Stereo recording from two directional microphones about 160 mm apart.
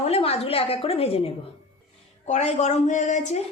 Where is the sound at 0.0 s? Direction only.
40° left (ahead or behind).